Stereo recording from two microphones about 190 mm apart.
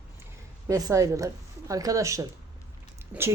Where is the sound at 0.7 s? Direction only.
15° right (ahead or behind).